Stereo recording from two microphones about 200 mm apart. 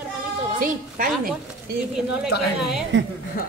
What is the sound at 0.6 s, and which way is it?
Speech, 45° right (ahead or behind).